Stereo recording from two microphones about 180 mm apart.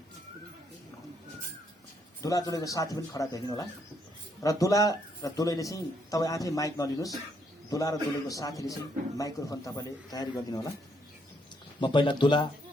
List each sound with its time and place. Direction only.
2.2 s speech: 20° left (ahead or behind)
11.8 s speech: 25° left (ahead or behind)